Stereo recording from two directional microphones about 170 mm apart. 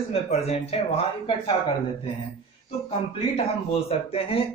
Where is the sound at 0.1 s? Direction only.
35° left (ahead or behind).